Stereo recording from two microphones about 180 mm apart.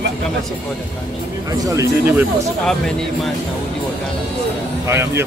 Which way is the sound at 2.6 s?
5° left (ahead or behind).